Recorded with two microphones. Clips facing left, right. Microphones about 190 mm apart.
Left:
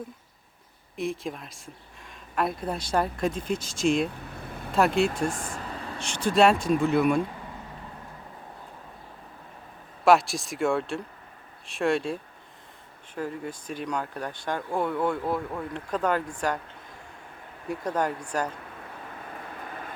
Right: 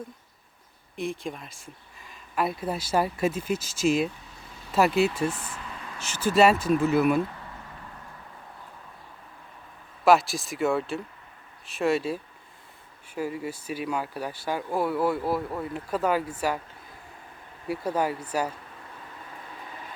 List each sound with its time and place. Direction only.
0.9 s speech: centre (ahead or behind)
4.3 s vehicle: 55° left (ahead or behind); by 6.0 s 35° left (ahead or behind)
6.0 s speech: 5° right (ahead or behind)
10.0 s speech: centre (ahead or behind)
17.7 s speech: 5° right (ahead or behind)